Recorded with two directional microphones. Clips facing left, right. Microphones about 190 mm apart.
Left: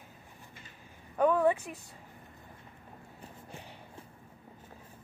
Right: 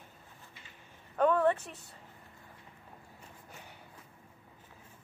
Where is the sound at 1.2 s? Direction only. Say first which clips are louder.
Left 1 dB; 10° left (ahead or behind).